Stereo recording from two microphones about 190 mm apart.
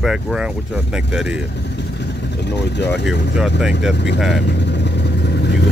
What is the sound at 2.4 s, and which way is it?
Speech, 65° left (ahead or behind).